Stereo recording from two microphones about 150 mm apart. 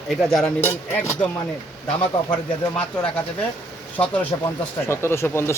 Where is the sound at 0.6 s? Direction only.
15° left (ahead or behind).